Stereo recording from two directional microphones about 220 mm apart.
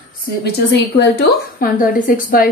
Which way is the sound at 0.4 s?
50° left (ahead or behind).